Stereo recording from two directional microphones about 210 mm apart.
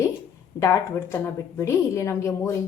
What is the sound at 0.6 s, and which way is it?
A woman's voice, 15° left (ahead or behind).